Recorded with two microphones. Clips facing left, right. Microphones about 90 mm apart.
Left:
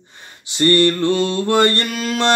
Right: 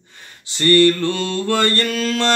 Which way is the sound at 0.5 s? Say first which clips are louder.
Right 1 dB; 20° left (ahead or behind).